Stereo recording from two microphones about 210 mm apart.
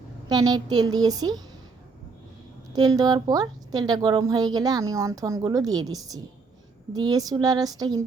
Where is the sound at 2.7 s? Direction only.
20° right (ahead or behind).